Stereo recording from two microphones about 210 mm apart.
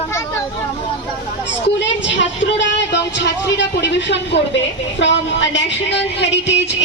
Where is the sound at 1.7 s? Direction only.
60° left (ahead or behind).